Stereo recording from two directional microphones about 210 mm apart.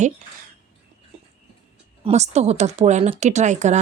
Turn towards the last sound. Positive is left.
turn(degrees=-35)  # may be behind; listen again after turning